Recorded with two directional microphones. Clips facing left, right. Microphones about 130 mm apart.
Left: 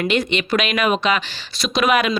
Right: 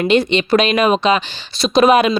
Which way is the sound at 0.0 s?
25° right (ahead or behind).